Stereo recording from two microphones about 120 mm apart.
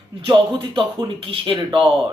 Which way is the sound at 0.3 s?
45° right (ahead or behind).